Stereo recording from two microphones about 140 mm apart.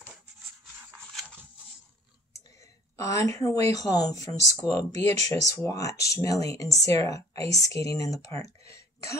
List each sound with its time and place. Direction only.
2.3 s speech: 20° left (ahead or behind)
4.9 s speech: 55° right (ahead or behind)
5.3 s speech: 25° left (ahead or behind)
8.6 s a sound: 20° left (ahead or behind)